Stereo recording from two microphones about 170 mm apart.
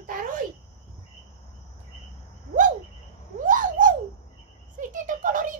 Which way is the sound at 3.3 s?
50° right (ahead or behind).